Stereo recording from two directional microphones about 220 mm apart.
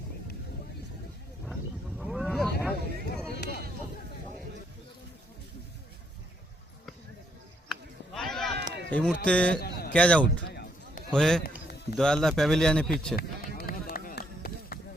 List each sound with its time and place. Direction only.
2.0 s vehicle: centre (ahead or behind)
3.3 s a sound: 50° left (ahead or behind)
7.7 s a sound: centre (ahead or behind)
8.9 s a man's voice: 5° left (ahead or behind)
9.6 s a sound: 45° left (ahead or behind)
9.9 s a man's voice: 5° left (ahead or behind)
10.4 s run: 45° left (ahead or behind)
11.1 s a man's voice: 5° left (ahead or behind)
11.4 s music: 45° left (ahead or behind)
11.9 s a man's voice: centre (ahead or behind)
13.1 s run: 45° left (ahead or behind)